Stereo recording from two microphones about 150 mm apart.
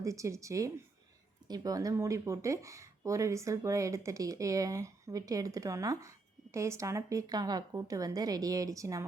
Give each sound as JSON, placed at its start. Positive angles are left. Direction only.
{"t": 0.0, "sound": "speech", "side_deg": -20}